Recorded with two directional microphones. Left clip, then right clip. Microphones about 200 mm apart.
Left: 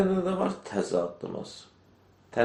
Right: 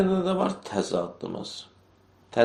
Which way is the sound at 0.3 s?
30° right (ahead or behind).